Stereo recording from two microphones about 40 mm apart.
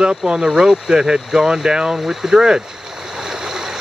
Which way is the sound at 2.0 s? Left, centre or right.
Centre.